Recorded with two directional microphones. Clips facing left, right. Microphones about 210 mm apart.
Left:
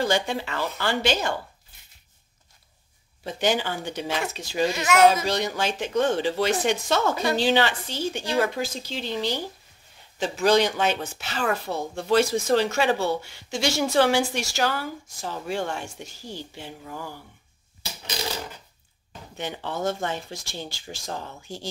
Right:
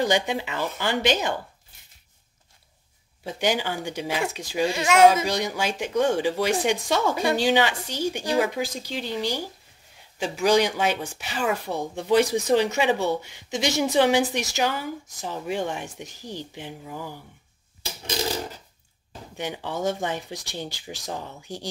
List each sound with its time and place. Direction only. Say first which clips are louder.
0.0 s speech: right 1 dB; 15° right (ahead or behind)
3.3 s speech: even; 10° right (ahead or behind)
19.3 s speech: right 1 dB; 10° right (ahead or behind)